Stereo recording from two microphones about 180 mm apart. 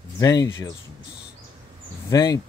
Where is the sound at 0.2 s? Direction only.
20° left (ahead or behind).